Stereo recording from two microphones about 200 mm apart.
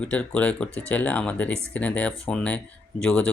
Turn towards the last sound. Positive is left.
turn(degrees=5)  # may be behind; listen again after turning